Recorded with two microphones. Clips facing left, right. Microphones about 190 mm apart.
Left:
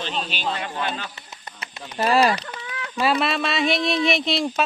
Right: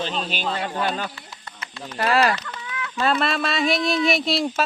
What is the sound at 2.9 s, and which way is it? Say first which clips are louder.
Speech: left 1 dB; 10° left (ahead or behind).